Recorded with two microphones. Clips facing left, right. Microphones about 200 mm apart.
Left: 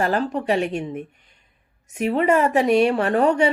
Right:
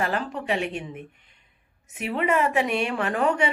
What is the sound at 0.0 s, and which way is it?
A woman's voice, 40° left (ahead or behind).